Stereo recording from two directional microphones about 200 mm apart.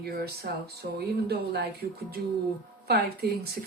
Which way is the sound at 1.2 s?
55° right (ahead or behind).